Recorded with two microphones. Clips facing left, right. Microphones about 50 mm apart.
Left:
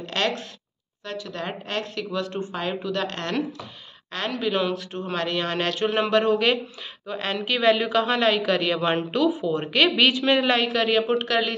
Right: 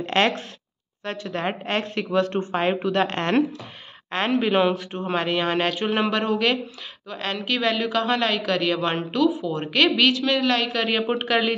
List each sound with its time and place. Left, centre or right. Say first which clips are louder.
0.0 s a sound: right 5 dB; right
1.0 s a woman's voice: right 4 dB; right; by 10.7 s centre
10.7 s speech: left 2 dB; centre